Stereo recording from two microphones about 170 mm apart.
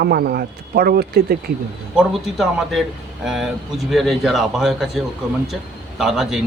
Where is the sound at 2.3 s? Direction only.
Centre (ahead or behind).